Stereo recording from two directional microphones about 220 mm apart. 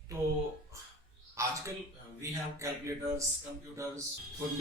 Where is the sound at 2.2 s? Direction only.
15° right (ahead or behind).